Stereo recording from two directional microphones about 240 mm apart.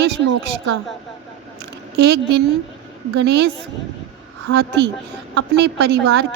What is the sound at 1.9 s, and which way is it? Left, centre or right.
A woman's voice, right.